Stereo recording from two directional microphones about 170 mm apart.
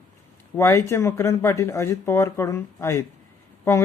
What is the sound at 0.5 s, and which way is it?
Speech, 15° left (ahead or behind).